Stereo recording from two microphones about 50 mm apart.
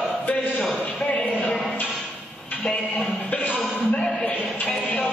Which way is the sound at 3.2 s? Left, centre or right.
Left.